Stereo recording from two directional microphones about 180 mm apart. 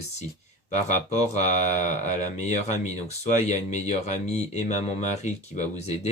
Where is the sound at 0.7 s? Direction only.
40° left (ahead or behind).